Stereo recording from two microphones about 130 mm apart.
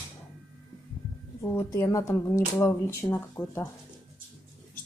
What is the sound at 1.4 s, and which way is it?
Speech, 20° left (ahead or behind).